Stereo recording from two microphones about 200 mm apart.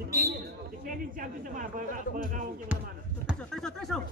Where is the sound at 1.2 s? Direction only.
40° right (ahead or behind).